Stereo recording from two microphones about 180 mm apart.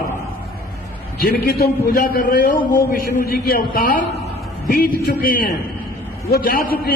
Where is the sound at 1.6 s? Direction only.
55° left (ahead or behind).